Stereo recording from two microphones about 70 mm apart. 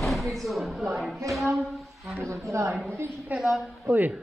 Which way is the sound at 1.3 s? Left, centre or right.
Centre.